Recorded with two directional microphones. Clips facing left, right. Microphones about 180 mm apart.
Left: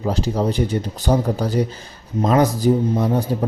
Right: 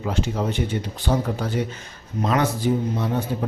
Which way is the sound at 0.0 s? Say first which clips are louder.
Left 4 dB; 35° left (ahead or behind).